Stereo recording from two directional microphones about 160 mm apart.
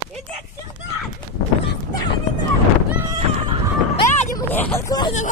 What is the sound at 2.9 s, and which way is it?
Neigh, 15° right (ahead or behind).